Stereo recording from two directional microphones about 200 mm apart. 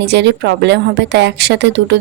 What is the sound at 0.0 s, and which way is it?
A woman's voice, 60° right (ahead or behind).